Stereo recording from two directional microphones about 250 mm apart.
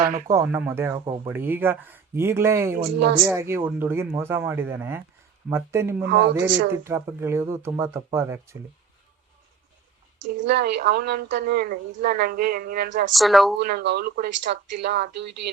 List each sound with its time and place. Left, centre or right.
0.3 s speech: centre
1.3 s speech: centre
6.1 s speech: right
6.8 s speech: centre
10.3 s a woman's voice: right
13.1 s a woman's voice: centre
13.6 s a woman's voice: right